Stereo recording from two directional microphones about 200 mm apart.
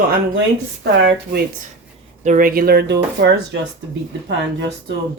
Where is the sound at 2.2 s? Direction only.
40° right (ahead or behind); by 3.3 s 60° right (ahead or behind).